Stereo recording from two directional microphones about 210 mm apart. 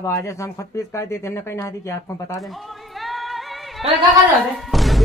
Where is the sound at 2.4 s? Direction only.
Centre (ahead or behind).